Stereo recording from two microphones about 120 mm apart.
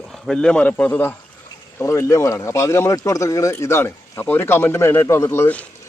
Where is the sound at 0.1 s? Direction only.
5° left (ahead or behind).